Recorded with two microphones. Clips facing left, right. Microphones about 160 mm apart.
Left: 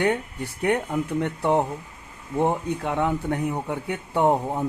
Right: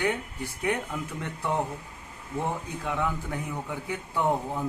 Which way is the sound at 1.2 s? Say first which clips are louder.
Left 6 dB; 65° left (ahead or behind).